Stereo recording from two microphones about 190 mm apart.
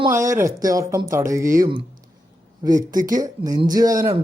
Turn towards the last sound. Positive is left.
turn(degrees=-15)  # may be behind; listen again after turning